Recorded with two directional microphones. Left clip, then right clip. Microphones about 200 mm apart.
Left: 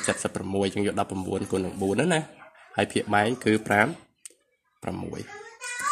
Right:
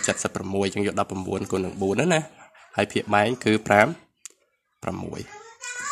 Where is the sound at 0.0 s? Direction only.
25° right (ahead or behind).